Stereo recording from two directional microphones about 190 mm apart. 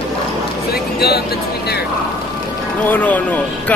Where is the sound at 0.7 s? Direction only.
55° left (ahead or behind).